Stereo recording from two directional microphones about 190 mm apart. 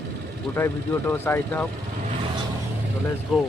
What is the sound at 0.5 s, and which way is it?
Speech, 10° left (ahead or behind).